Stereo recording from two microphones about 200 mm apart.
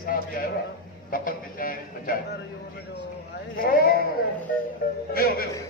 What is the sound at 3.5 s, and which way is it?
Speech, 50° left (ahead or behind).